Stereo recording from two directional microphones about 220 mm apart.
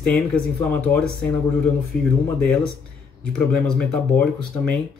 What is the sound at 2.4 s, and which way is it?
Speech, 5° left (ahead or behind).